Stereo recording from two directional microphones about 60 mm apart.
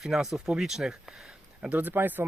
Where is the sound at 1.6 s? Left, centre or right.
Right.